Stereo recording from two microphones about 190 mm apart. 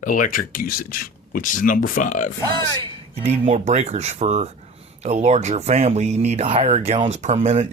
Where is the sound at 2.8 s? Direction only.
35° right (ahead or behind).